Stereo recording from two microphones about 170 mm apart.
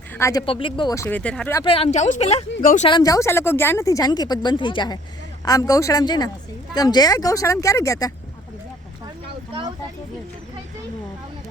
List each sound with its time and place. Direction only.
0.1 s speech: 15° left (ahead or behind)
0.4 s speech: 30° left (ahead or behind)
0.9 s speech: 10° left (ahead or behind)
1.6 s speech: 35° left (ahead or behind)
2.6 s speech: 55° left (ahead or behind)
2.8 s speech: 25° left (ahead or behind)
9.5 s speech: 30° right (ahead or behind)